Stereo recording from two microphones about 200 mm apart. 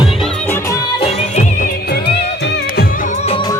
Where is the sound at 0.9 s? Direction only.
30° left (ahead or behind).